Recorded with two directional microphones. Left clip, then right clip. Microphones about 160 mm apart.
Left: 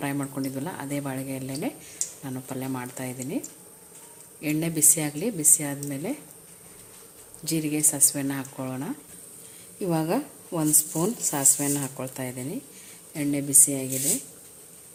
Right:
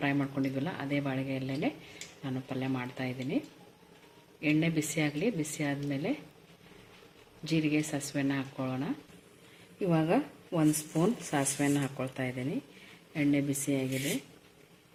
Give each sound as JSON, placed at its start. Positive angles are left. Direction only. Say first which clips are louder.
{"t": 0.0, "sound": "a woman's voice", "louder": "left 1 dB", "side_deg": 15}
{"t": 7.4, "sound": "a woman's voice", "louder": "left 3 dB", "side_deg": 20}